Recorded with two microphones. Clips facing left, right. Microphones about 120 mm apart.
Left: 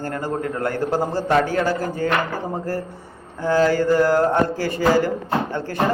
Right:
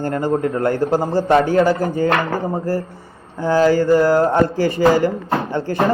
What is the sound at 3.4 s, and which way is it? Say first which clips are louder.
Speech: right 3 dB; 15° right (ahead or behind).